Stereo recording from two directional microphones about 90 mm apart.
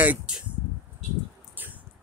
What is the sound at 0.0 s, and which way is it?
Speech, 15° right (ahead or behind).